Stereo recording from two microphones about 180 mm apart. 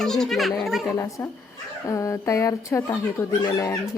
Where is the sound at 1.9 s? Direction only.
15° left (ahead or behind).